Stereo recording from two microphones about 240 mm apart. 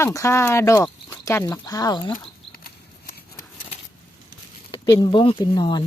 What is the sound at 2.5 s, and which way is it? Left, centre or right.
Horse, left.